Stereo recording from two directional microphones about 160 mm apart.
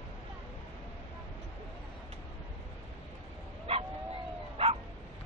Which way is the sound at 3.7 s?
35° right (ahead or behind).